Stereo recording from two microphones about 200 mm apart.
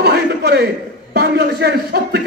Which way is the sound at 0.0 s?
55° right (ahead or behind).